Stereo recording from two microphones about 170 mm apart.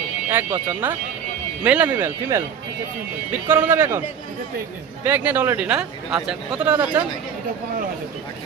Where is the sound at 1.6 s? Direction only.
10° right (ahead or behind).